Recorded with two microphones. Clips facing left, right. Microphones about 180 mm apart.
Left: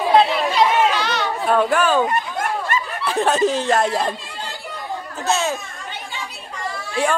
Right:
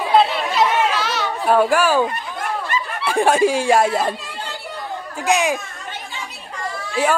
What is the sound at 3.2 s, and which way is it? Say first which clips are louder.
Speech: right 2 dB; 10° right (ahead or behind).